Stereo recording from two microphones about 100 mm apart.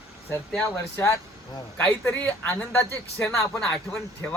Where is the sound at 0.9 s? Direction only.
25° left (ahead or behind).